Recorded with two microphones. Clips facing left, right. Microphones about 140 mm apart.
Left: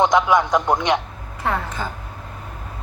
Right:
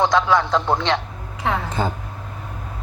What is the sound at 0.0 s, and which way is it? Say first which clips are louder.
Speech: left 1 dB; 20° left (ahead or behind).